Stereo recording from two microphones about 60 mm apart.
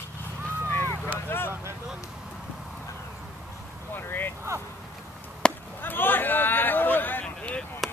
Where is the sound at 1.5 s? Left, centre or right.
Right.